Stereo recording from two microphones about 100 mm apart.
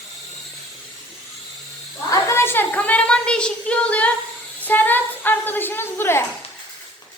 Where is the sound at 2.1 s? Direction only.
30° left (ahead or behind); by 4.1 s 15° left (ahead or behind).